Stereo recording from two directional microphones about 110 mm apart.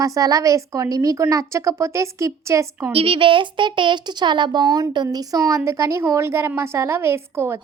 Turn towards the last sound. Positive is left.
turn(degrees=-25)  # may be behind; listen again after turning